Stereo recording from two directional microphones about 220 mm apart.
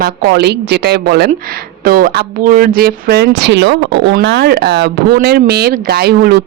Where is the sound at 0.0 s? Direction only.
45° right (ahead or behind).